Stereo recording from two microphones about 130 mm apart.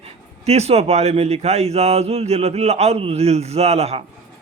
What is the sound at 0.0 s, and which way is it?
Speech, 55° right (ahead or behind).